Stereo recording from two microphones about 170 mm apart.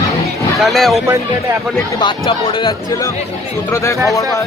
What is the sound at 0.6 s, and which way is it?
Speech, centre (ahead or behind).